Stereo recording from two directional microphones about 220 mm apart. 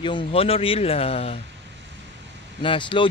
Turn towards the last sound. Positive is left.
turn(degrees=20)  # may be behind; listen again after turning